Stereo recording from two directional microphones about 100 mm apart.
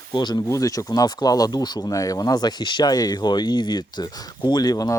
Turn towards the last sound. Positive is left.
turn(degrees=40)  # may be behind; listen again after turning